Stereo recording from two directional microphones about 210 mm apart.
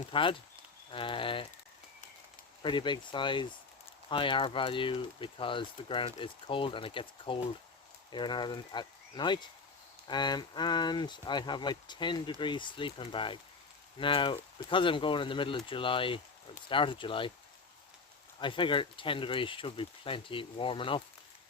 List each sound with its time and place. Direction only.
0.1 s speech: 25° left (ahead or behind)
2.6 s speech: 20° left (ahead or behind)
18.3 s speech: 25° left (ahead or behind)